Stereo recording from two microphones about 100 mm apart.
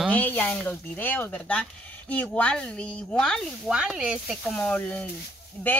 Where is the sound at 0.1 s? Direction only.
15° left (ahead or behind).